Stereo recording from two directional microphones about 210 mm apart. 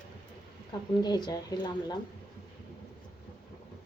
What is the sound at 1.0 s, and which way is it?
Speech, 20° left (ahead or behind).